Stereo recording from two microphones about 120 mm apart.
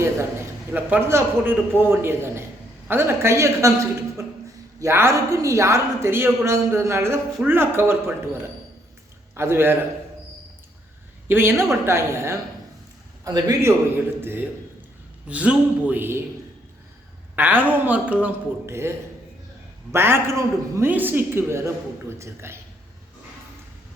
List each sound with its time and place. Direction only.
0.7 s a woman's voice: 15° right (ahead or behind)
11.3 s a woman's voice: 20° right (ahead or behind)
17.3 s a woman's voice: 15° right (ahead or behind)